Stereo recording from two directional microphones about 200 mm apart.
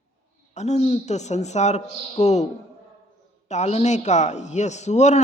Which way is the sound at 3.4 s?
35° left (ahead or behind).